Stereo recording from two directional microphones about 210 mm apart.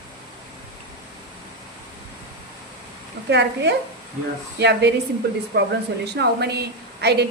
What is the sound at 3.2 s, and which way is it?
Speech, 55° right (ahead or behind).